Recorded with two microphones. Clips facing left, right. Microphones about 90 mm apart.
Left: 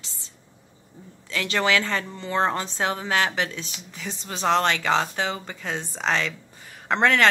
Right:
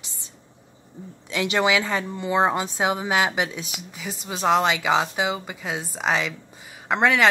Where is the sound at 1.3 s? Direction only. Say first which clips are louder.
Right 2 dB; 20° right (ahead or behind).